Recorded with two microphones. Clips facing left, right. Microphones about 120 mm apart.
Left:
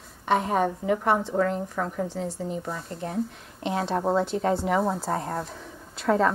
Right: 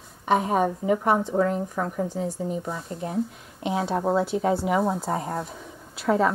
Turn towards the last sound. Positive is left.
turn(degrees=-5)  # may be behind; listen again after turning